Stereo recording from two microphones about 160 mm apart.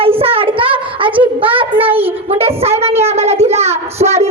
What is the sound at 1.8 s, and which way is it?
Child singing, 10° right (ahead or behind).